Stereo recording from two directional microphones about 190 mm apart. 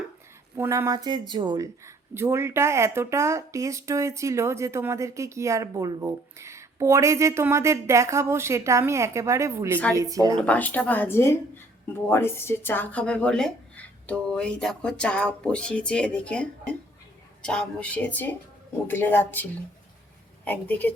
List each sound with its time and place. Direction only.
0.5 s speech: 15° right (ahead or behind)
10.3 s speech: 5° left (ahead or behind)